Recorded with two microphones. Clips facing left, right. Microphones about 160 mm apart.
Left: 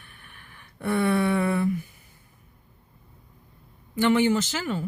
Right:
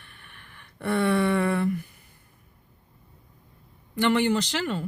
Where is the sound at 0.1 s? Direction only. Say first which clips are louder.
Even; 10° left (ahead or behind).